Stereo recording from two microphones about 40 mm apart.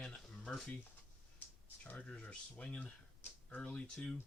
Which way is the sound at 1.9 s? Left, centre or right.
Left.